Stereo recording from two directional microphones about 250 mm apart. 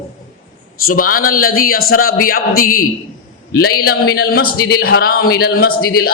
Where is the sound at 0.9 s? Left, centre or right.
Left.